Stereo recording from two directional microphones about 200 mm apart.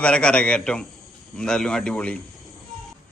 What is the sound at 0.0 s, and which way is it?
A man's voice, 5° left (ahead or behind).